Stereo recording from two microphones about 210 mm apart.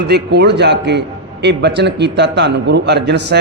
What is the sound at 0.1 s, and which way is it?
A man's voice, 50° right (ahead or behind).